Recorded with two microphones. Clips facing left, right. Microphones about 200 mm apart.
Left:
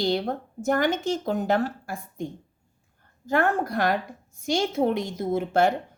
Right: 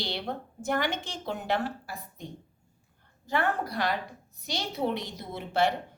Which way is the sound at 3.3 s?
45° left (ahead or behind).